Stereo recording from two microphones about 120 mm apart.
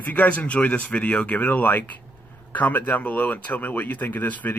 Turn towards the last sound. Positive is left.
turn(degrees=15)  # may be behind; listen again after turning